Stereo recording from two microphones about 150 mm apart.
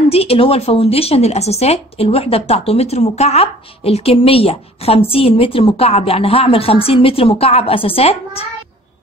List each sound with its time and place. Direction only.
0.1 s speech: 40° left (ahead or behind)